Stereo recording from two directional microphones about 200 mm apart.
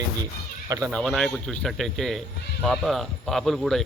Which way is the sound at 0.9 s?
5° left (ahead or behind).